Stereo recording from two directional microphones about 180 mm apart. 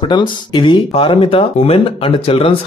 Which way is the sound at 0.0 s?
25° left (ahead or behind).